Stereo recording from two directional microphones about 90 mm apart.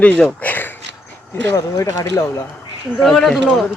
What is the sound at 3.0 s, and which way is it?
Speech, 5° left (ahead or behind).